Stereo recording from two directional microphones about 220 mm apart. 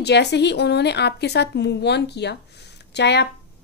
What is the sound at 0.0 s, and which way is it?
Speech, 50° left (ahead or behind).